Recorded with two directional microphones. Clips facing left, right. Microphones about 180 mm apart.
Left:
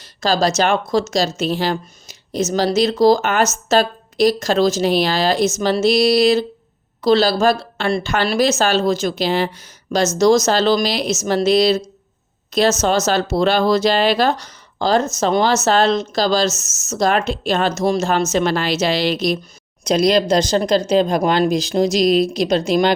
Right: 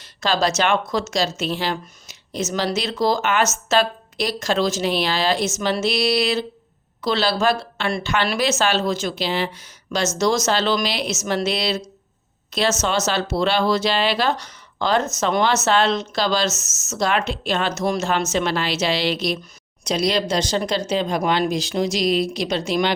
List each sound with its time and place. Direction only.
0.0 s a woman's voice: 40° left (ahead or behind)